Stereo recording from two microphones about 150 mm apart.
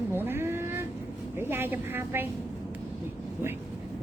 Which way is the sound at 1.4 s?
15° right (ahead or behind).